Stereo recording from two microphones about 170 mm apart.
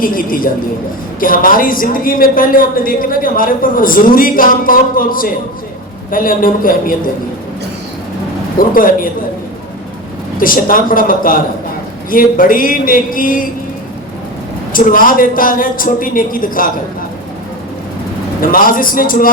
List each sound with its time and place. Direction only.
0.0 s a man's voice: 55° left (ahead or behind)
8.5 s a man's voice: 55° left (ahead or behind)
10.3 s a man's voice: 55° left (ahead or behind)
14.7 s a man's voice: 55° left (ahead or behind)
18.3 s a man's voice: 55° left (ahead or behind)